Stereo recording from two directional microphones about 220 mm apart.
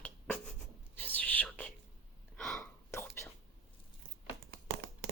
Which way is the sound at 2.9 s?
10° left (ahead or behind).